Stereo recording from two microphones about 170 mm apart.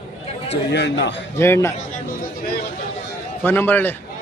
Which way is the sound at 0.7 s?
90° left.